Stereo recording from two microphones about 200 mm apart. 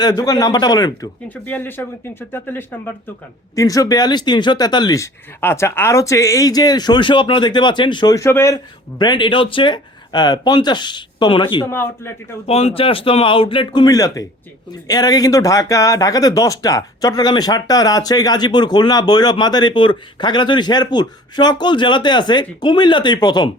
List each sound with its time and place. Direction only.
0.0 s speech: 20° left (ahead or behind)
1.3 s speech: 10° left (ahead or behind); by 11.7 s 25° left (ahead or behind)
11.7 s speech: 10° left (ahead or behind)
12.5 s speech: 30° left (ahead or behind)